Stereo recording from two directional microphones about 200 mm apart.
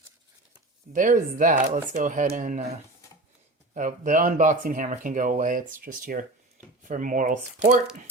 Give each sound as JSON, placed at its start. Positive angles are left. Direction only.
{"t": 0.9, "sound": "speech", "side_deg": -40}
{"t": 3.8, "sound": "speech", "side_deg": -40}